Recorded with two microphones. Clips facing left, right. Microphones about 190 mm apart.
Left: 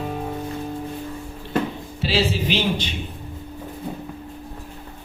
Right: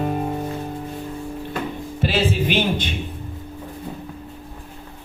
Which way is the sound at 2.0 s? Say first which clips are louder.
Right 1 dB; 50° right (ahead or behind).